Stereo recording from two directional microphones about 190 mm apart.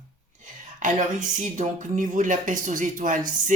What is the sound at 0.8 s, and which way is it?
Speech, 40° right (ahead or behind).